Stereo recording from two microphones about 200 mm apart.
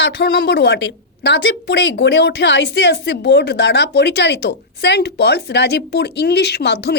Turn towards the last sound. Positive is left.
turn(degrees=55)  # may be behind; listen again after turning